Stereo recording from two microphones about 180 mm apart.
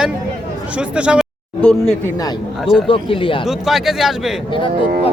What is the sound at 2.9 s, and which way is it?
Speech, 30° left (ahead or behind).